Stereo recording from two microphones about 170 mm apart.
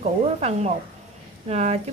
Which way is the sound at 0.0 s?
40° right (ahead or behind).